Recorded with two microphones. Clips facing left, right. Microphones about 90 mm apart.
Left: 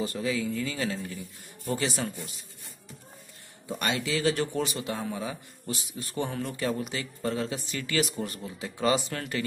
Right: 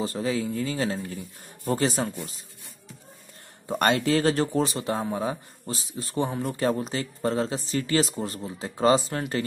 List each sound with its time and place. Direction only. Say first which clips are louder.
0.0 s speech: right 2 dB; 30° right (ahead or behind)
3.6 s speech: right 7 dB; 50° right (ahead or behind); by 9.2 s 30° right (ahead or behind)